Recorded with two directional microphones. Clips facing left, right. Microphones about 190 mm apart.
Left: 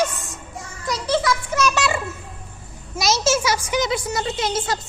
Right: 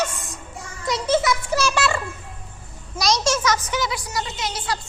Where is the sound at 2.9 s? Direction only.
5° left (ahead or behind).